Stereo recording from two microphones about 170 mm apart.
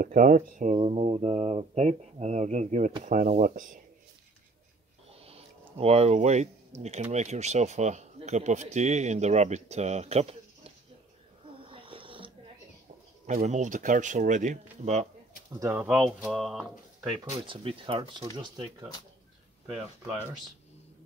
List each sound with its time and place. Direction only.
0.0 s speech: 50° right (ahead or behind)
0.7 s speech: 35° right (ahead or behind); by 3.8 s 50° right (ahead or behind)
5.1 s speech: 35° right (ahead or behind)
11.4 s snoring: 30° right (ahead or behind)
13.3 s speech: 45° right (ahead or behind)
15.7 s speech: 5° right (ahead or behind)
17.1 s speech: 30° right (ahead or behind)